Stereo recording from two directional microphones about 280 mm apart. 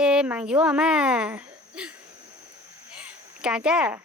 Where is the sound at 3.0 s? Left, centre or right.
Centre.